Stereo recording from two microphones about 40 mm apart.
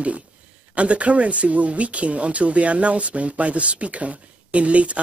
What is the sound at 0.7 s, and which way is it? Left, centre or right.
Speech, right.